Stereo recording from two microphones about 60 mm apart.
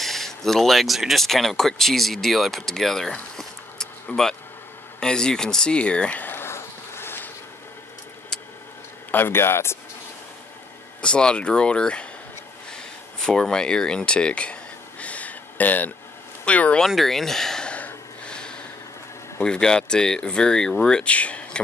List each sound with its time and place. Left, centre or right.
0.0 s speech: centre; by 6.3 s left
6.3 s a sound: left
9.1 s speech: left
11.0 s speech: centre
12.7 s a sound: centre; by 15.9 s left
16.4 s speech: left
16.8 s speech: centre
17.6 s snort: left
19.4 s speech: centre